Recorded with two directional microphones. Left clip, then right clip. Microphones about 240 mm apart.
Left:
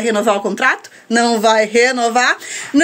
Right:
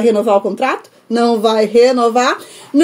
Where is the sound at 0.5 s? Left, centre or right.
Centre.